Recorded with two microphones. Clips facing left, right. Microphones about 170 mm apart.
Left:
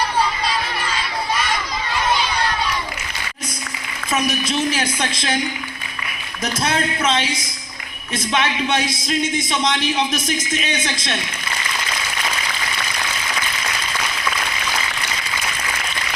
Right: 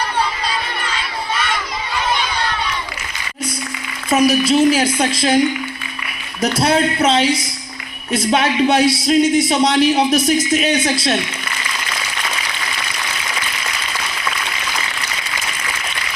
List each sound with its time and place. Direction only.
4.1 s speech: 35° right (ahead or behind)
6.4 s speech: 35° right (ahead or behind)